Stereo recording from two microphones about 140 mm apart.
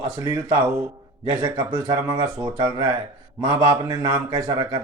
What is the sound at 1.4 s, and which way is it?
Speech, 30° right (ahead or behind).